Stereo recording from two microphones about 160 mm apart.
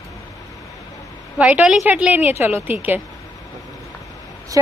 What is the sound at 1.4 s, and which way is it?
A woman's voice, 10° right (ahead or behind).